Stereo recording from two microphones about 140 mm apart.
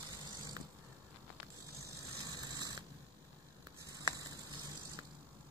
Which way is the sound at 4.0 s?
25° right (ahead or behind).